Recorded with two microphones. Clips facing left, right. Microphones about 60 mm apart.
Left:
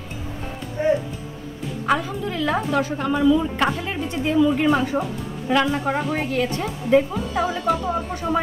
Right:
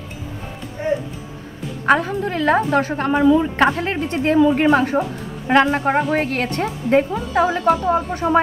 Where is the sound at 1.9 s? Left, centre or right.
Right.